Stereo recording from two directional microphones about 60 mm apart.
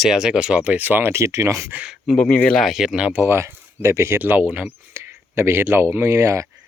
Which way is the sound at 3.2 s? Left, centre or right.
Right.